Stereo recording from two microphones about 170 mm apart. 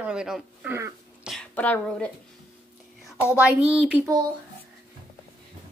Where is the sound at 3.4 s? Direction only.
5° right (ahead or behind).